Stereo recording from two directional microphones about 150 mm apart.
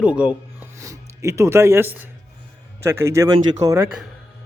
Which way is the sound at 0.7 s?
20° right (ahead or behind).